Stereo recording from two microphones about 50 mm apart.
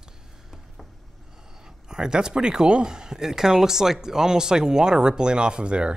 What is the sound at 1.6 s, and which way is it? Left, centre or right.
Speech, centre.